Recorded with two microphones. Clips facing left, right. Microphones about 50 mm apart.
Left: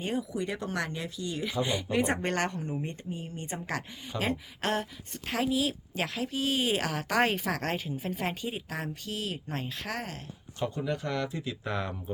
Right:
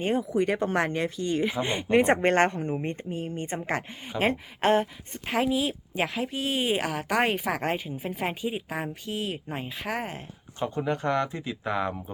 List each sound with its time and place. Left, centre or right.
0.0 s a woman's voice: right
11.6 s a woman's voice: centre